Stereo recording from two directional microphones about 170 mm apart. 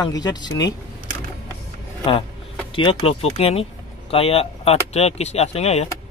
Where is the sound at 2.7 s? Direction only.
30° left (ahead or behind).